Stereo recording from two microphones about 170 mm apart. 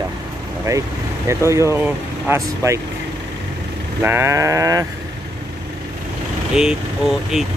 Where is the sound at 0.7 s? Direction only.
15° right (ahead or behind).